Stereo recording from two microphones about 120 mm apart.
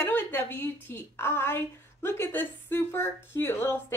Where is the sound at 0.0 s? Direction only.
15° left (ahead or behind).